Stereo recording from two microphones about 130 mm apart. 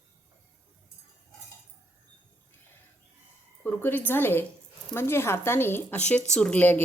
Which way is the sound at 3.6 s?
15° left (ahead or behind).